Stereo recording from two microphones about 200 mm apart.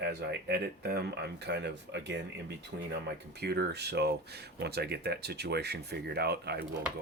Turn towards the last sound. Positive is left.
turn(degrees=-55)  # may be behind; listen again after turning